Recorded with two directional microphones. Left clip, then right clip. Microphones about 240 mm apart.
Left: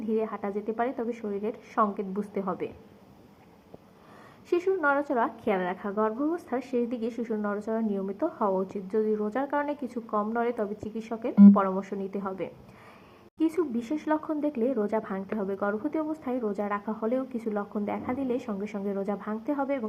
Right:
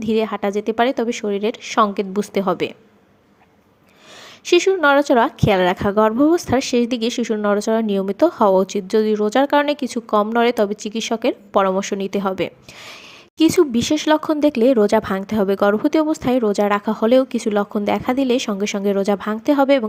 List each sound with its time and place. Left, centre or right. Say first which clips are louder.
0.0 s speech: right 10 dB; right
4.5 s speech: right 11 dB; right